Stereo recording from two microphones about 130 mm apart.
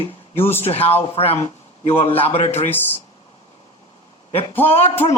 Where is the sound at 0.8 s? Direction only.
15° left (ahead or behind).